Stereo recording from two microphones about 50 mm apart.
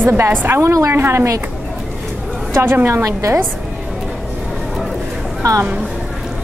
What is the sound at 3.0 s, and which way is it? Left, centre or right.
Speech, right.